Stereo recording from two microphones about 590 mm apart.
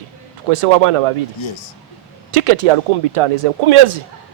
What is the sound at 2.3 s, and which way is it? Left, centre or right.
Speech, right.